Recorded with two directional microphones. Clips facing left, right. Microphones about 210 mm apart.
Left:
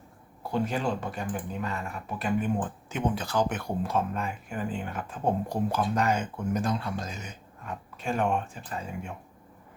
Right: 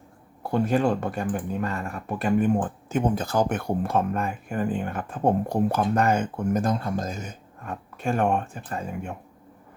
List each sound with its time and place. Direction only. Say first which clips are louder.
0.5 s speech: right 6 dB; 55° right (ahead or behind)